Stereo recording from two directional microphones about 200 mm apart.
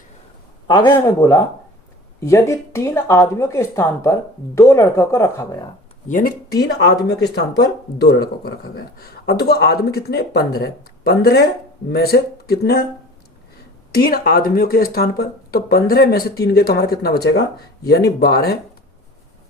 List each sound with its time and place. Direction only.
0.7 s speech: 20° left (ahead or behind)
6.1 s speech: 45° left (ahead or behind)
13.9 s speech: 50° left (ahead or behind)